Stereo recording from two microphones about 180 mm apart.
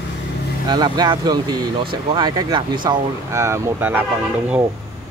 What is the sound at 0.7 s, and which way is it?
Speech, 25° right (ahead or behind).